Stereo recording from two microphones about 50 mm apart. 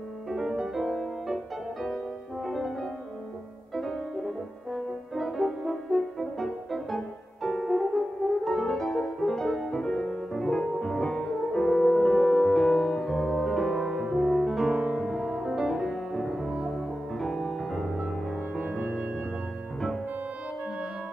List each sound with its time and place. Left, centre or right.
0.3 s music: centre
4.7 s french horn: centre
7.4 s music: centre
8.5 s french horn: centre
9.2 s music: centre
18.6 s music: right